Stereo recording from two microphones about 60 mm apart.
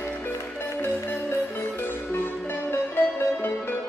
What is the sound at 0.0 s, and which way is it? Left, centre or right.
Music, left.